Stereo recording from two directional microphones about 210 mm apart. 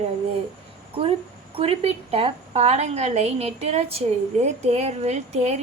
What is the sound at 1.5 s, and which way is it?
A woman's voice, 30° right (ahead or behind).